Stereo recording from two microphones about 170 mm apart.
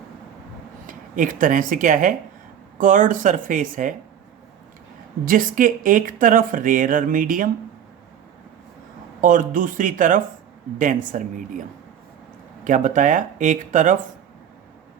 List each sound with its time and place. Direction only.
0.9 s speech: 50° right (ahead or behind)
5.2 s speech: 55° right (ahead or behind)
9.2 s speech: 50° right (ahead or behind)
12.6 s speech: 50° right (ahead or behind)